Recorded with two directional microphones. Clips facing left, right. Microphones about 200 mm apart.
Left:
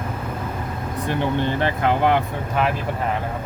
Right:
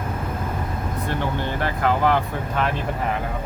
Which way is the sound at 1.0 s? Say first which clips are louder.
Left 5 dB; 20° left (ahead or behind).